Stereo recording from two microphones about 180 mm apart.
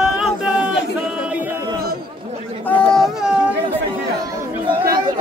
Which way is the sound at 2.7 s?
5° left (ahead or behind).